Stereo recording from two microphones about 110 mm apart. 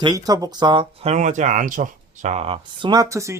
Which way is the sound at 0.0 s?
35° right (ahead or behind).